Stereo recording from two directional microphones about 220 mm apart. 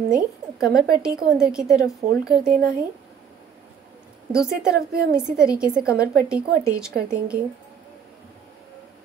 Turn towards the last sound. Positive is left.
turn(degrees=-40)  # may be behind; listen again after turning